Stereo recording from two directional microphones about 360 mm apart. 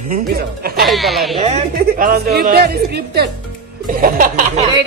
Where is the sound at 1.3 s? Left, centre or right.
Centre.